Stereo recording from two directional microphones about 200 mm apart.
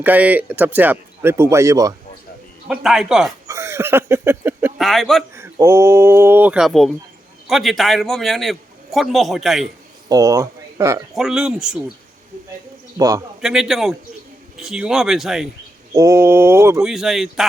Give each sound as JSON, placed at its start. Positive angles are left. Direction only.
{"t": 0.0, "sound": "speech", "side_deg": -10}
{"t": 2.6, "sound": "a man's voice", "side_deg": -5}
{"t": 3.4, "sound": "a sound", "side_deg": -15}
{"t": 4.8, "sound": "a man's voice", "side_deg": 0}
{"t": 5.3, "sound": "a man's voice", "side_deg": -15}
{"t": 10.1, "sound": "speech", "side_deg": -15}
{"t": 11.1, "sound": "a man's voice", "side_deg": 0}
{"t": 13.0, "sound": "speech", "side_deg": -15}
{"t": 13.4, "sound": "a man's voice", "side_deg": 0}
{"t": 15.9, "sound": "speech", "side_deg": -15}
{"t": 16.8, "sound": "a man's voice", "side_deg": 0}